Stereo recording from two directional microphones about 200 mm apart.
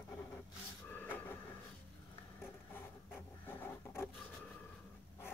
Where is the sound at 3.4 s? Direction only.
10° left (ahead or behind).